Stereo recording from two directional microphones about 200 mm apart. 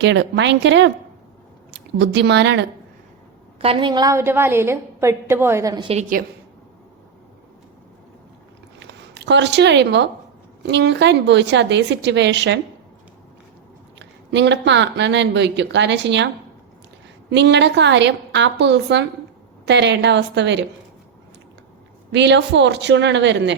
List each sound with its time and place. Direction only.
0.0 s speech: 60° right (ahead or behind)
3.6 s a woman's voice: 25° right (ahead or behind)
5.9 s a woman's voice: 40° right (ahead or behind)
8.8 s speech: 60° right (ahead or behind)
14.0 s speech: 60° right (ahead or behind)
22.1 s speech: 60° right (ahead or behind)